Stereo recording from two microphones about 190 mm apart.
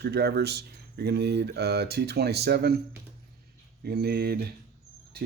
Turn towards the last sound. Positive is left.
turn(degrees=-55)  # may be behind; listen again after turning